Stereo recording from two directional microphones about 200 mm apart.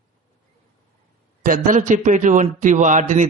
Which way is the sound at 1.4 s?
40° right (ahead or behind).